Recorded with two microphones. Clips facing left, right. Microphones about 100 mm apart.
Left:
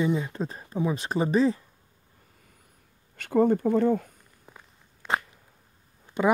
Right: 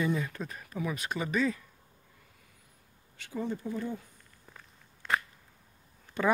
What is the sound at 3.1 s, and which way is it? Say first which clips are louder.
Speech: left 14 dB; 60° left (ahead or behind).